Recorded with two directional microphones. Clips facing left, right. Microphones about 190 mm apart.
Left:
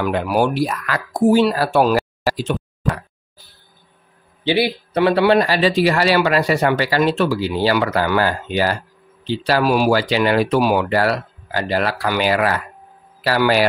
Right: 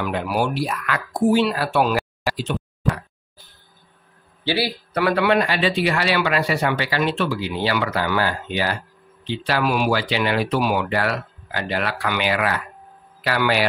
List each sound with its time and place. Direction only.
0.0 s speech: 45° left (ahead or behind)
4.5 s speech: 20° left (ahead or behind); by 13.7 s 40° left (ahead or behind)